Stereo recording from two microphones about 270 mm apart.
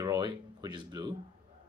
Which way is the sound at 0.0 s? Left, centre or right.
Centre.